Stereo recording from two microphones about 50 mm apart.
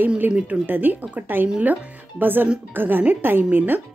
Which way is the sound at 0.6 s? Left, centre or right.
Right.